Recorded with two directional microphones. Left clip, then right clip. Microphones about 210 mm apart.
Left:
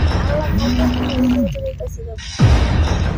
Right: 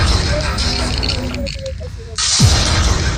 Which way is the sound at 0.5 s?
45° right (ahead or behind).